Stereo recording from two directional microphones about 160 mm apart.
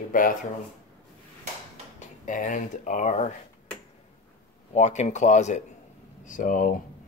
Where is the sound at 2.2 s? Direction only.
55° left (ahead or behind).